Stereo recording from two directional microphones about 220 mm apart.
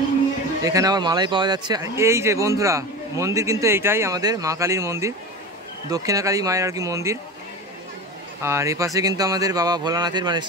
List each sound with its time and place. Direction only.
0.7 s speech: 15° right (ahead or behind)
8.4 s speech: 10° right (ahead or behind)